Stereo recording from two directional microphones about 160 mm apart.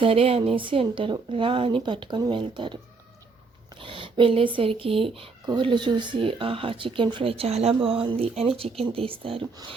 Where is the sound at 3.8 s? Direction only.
35° right (ahead or behind).